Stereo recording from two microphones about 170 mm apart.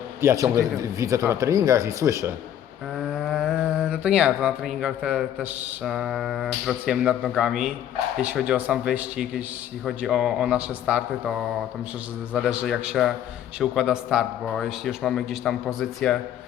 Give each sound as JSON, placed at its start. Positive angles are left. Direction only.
{"t": 0.2, "sound": "a man's voice", "side_deg": -15}
{"t": 3.0, "sound": "speech", "side_deg": 0}